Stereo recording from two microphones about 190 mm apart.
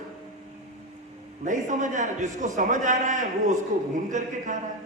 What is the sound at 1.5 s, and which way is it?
A man's voice, 40° right (ahead or behind).